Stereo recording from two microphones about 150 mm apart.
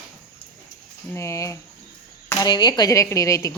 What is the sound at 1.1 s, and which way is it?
A woman's voice, 20° left (ahead or behind).